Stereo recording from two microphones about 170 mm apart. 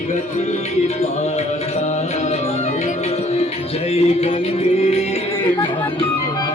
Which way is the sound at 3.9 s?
35° left (ahead or behind).